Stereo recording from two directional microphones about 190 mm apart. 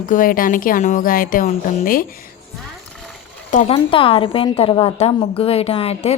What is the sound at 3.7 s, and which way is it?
A woman's voice, 30° left (ahead or behind).